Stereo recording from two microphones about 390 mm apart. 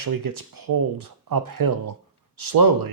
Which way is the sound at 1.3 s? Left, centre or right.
Right.